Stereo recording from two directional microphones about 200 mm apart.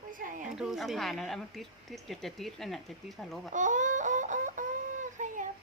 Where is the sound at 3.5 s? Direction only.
40° right (ahead or behind).